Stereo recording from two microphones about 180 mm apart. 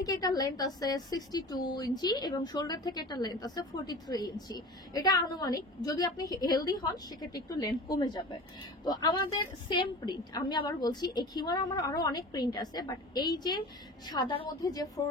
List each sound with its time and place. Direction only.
0.0 s a woman's voice: 20° left (ahead or behind)